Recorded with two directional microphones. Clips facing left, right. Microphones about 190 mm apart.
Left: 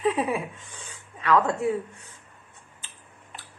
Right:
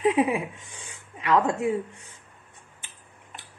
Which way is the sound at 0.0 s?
20° right (ahead or behind).